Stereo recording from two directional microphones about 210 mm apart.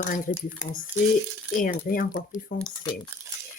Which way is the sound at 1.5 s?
40° left (ahead or behind).